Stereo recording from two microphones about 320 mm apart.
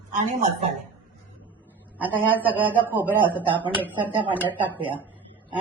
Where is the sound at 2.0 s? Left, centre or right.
Centre.